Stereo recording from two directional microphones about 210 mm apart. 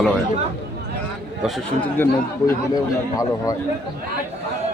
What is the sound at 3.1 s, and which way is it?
Speech, 15° left (ahead or behind).